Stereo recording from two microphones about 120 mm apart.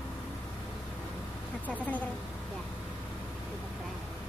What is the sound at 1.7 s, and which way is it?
Speech, 10° left (ahead or behind).